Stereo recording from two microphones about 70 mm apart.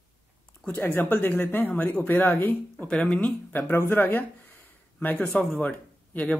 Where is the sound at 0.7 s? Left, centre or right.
Left.